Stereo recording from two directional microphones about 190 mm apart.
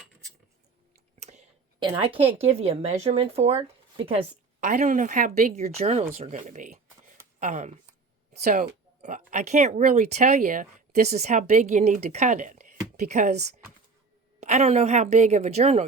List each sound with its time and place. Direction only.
1.8 s speech: 25° right (ahead or behind)